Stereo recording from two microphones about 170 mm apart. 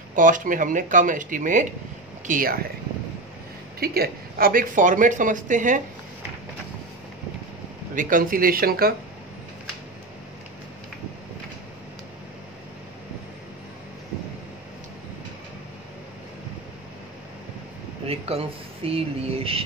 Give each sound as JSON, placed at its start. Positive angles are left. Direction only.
{"t": 0.1, "sound": "speech", "side_deg": -50}
{"t": 3.8, "sound": "speech", "side_deg": -65}
{"t": 7.9, "sound": "speech", "side_deg": -50}
{"t": 18.0, "sound": "speech", "side_deg": -35}